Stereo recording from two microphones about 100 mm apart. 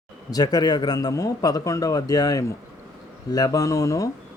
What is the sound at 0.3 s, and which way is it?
Speech, 40° left (ahead or behind).